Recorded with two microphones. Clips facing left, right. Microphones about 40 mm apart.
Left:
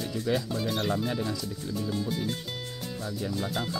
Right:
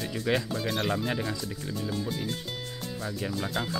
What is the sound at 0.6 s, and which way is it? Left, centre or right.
Music, centre.